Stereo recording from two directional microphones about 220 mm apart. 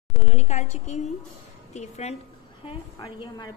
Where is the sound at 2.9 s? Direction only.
20° left (ahead or behind).